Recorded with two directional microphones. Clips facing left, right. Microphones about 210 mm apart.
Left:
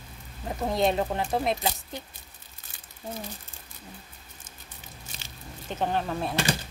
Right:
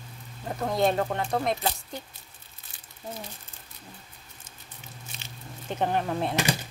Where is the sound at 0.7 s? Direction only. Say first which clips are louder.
Even; centre (ahead or behind).